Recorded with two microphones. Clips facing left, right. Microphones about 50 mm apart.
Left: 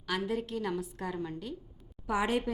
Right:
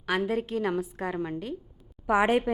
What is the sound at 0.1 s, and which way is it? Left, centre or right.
A woman's voice, right.